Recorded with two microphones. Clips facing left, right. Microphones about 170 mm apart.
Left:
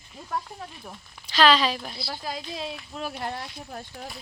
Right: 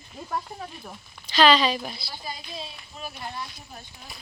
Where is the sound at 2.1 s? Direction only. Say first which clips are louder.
Left 4 dB; 90° left; by 3.4 s 70° left (ahead or behind).